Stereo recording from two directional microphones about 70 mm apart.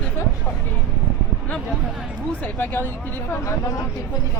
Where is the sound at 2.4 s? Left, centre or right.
Left.